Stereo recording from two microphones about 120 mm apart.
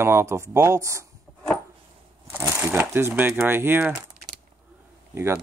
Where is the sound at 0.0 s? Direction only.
20° right (ahead or behind).